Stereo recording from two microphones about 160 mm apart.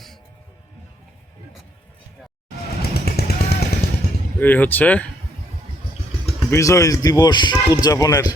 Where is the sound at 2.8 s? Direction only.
75° left (ahead or behind).